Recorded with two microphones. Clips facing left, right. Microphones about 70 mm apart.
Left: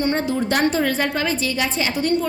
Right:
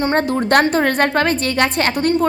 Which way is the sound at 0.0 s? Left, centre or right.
Right.